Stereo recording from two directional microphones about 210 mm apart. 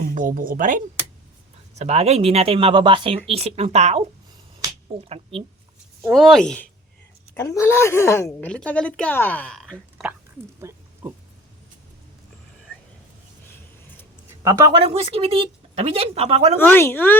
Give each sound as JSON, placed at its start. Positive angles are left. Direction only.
{"t": 0.0, "sound": "speech", "side_deg": -40}
{"t": 5.0, "sound": "speech", "side_deg": -30}
{"t": 6.0, "sound": "speech", "side_deg": 0}
{"t": 10.6, "sound": "pig", "side_deg": -15}
{"t": 14.4, "sound": "speech", "side_deg": -15}
{"t": 14.7, "sound": "speech", "side_deg": -25}
{"t": 16.6, "sound": "speech", "side_deg": 10}